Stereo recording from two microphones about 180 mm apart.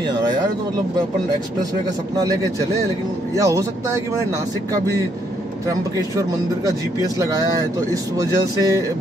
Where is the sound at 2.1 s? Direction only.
20° right (ahead or behind).